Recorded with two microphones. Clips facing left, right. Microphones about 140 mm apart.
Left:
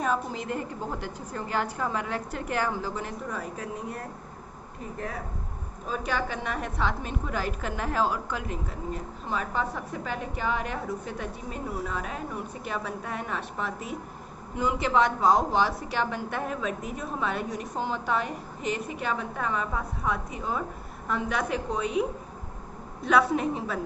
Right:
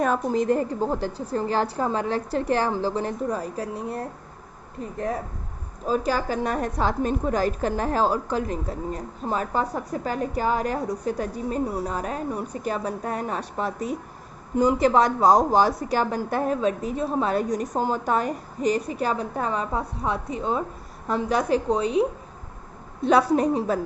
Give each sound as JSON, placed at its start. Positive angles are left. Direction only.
{"t": 0.0, "sound": "a woman's voice", "side_deg": -45}
{"t": 5.9, "sound": "a woman's voice", "side_deg": -35}
{"t": 23.0, "sound": "a woman's voice", "side_deg": -35}